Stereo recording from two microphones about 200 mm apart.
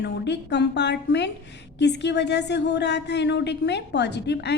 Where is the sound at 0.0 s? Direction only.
60° left (ahead or behind).